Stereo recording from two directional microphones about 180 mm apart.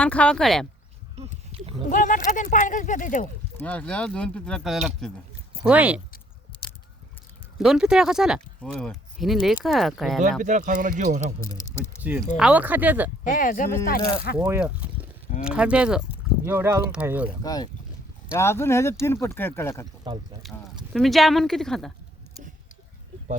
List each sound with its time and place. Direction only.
0.0 s speech: 5° left (ahead or behind)
1.5 s a sound: 35° right (ahead or behind)
1.9 s speech: 45° left (ahead or behind)
3.6 s speech: 10° left (ahead or behind)
7.6 s speech: 5° right (ahead or behind)
10.4 s speech: 45° right (ahead or behind)
11.5 s speech: 15° left (ahead or behind)
12.4 s speech: 5° right (ahead or behind)
13.2 s speech: 50° left (ahead or behind)
14.3 s speech: 10° right (ahead or behind)
17.4 s speech: 20° left (ahead or behind)
20.4 s speech: centre (ahead or behind)